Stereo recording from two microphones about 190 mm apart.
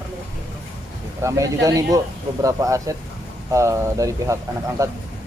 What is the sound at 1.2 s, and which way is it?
Speech, 15° right (ahead or behind).